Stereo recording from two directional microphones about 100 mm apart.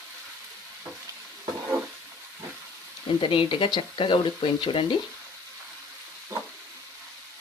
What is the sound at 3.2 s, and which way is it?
Speech, 60° left (ahead or behind).